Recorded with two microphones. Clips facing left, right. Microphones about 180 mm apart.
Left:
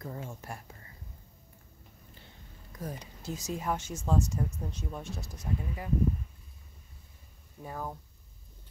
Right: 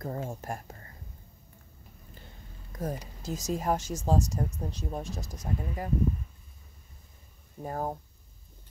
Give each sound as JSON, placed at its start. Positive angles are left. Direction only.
{"t": 0.0, "sound": "speech", "side_deg": -45}
{"t": 2.7, "sound": "speech", "side_deg": -45}
{"t": 7.6, "sound": "speech", "side_deg": -45}